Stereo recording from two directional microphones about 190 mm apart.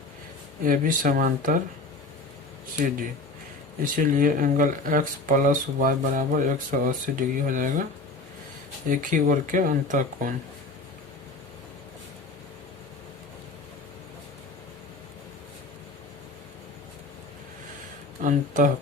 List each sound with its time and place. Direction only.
0.6 s speech: 45° right (ahead or behind)
3.9 s speech: 45° right (ahead or behind)
8.9 s speech: 45° right (ahead or behind)
18.2 s speech: 45° right (ahead or behind)